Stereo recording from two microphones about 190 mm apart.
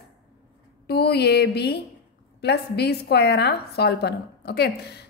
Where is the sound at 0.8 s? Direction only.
60° left (ahead or behind).